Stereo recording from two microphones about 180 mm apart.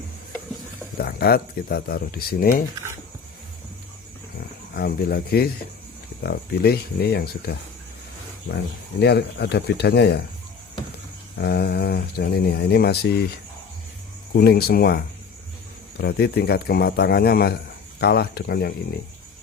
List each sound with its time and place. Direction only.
0.9 s speech: 60° left (ahead or behind)
4.4 s speech: 60° left (ahead or behind)
9.0 s speech: 65° left (ahead or behind)
11.3 s speech: 65° left (ahead or behind)
14.3 s speech: 60° left (ahead or behind)